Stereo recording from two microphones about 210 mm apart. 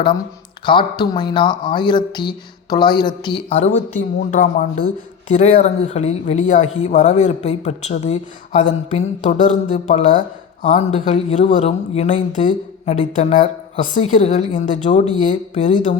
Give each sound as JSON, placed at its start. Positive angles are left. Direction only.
{"t": 0.6, "sound": "speech", "side_deg": 25}